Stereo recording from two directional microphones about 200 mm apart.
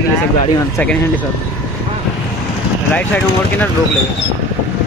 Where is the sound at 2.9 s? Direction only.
10° left (ahead or behind).